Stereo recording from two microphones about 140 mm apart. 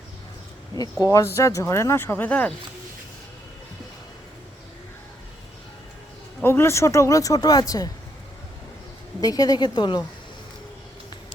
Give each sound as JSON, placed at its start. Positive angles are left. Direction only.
{"t": 1.0, "sound": "speech", "side_deg": 20}
{"t": 6.4, "sound": "speech", "side_deg": 20}
{"t": 9.2, "sound": "speech", "side_deg": 25}